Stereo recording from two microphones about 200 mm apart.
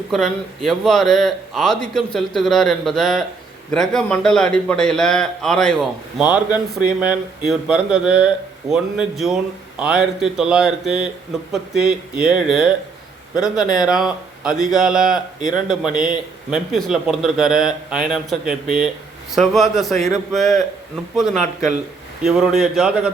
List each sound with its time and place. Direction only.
0.1 s speech: centre (ahead or behind)
6.1 s speech: 10° right (ahead or behind)
13.7 s speech: centre (ahead or behind)
15.4 s speech: 40° right (ahead or behind)
15.6 s speech: 5° right (ahead or behind)